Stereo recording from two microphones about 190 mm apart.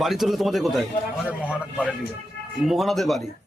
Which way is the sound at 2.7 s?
Centre (ahead or behind).